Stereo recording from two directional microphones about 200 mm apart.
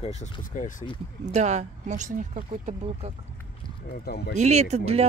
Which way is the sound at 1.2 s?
35° right (ahead or behind).